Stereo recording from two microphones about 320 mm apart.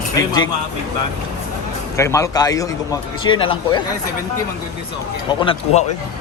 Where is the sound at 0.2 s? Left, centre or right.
Centre.